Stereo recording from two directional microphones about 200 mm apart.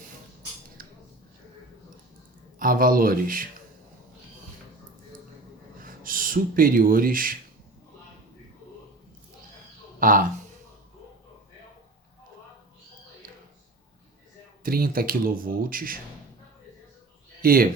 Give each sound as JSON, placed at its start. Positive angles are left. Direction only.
{"t": 0.8, "sound": "a sound", "side_deg": -45}
{"t": 2.6, "sound": "speech", "side_deg": -45}
{"t": 5.8, "sound": "speech", "side_deg": -45}
{"t": 10.0, "sound": "speech", "side_deg": -45}
{"t": 14.6, "sound": "speech", "side_deg": -50}
{"t": 17.4, "sound": "speech", "side_deg": -45}